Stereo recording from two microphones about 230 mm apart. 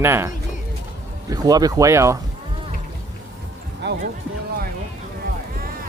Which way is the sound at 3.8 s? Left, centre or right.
Right.